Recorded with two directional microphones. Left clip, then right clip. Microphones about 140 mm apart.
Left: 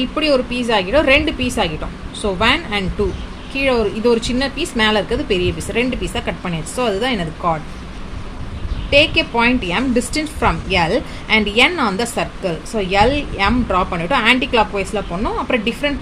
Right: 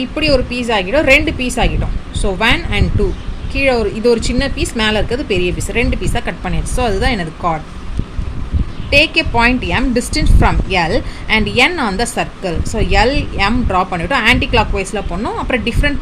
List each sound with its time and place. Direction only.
0.0 s a woman's voice: 20° right (ahead or behind)
8.9 s a woman's voice: 20° right (ahead or behind)